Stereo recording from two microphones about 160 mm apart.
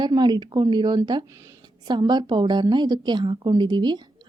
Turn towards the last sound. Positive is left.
turn(degrees=-30)  # may be behind; listen again after turning